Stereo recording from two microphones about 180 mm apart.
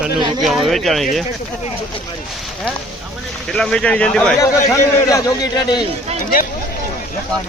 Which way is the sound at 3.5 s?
5° left (ahead or behind).